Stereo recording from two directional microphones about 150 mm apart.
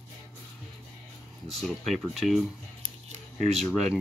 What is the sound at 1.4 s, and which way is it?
Speech, centre (ahead or behind).